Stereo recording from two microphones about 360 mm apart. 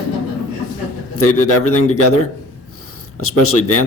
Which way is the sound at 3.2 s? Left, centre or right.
Left.